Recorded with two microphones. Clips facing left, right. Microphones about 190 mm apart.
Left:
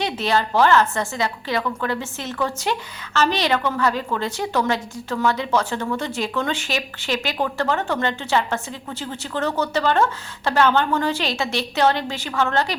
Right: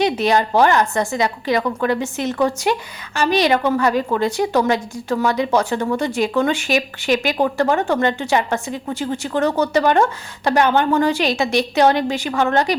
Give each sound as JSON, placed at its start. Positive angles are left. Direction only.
{"t": 0.0, "sound": "speech", "side_deg": -15}